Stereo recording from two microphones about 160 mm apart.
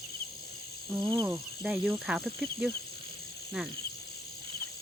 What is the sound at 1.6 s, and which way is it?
Speech, centre (ahead or behind).